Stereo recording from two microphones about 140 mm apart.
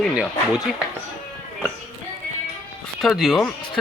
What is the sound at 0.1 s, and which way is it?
Speech, 5° right (ahead or behind).